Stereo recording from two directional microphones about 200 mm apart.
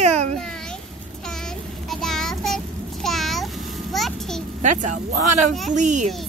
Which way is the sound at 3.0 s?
Centre (ahead or behind).